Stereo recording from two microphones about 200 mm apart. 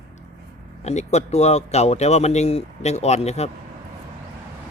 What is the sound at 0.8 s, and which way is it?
Speech, 35° left (ahead or behind).